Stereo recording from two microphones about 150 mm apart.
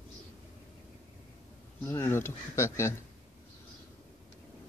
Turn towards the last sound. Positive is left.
turn(degrees=20)  # may be behind; listen again after turning